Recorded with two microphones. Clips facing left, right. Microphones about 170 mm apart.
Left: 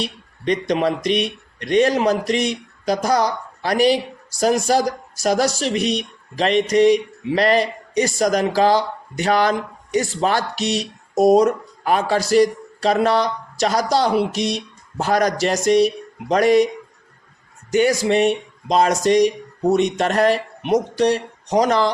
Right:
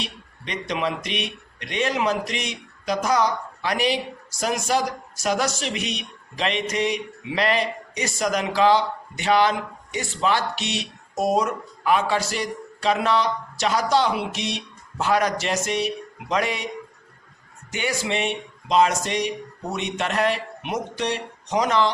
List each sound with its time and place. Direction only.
0.0 s speech: 35° left (ahead or behind)
17.7 s speech: 40° left (ahead or behind)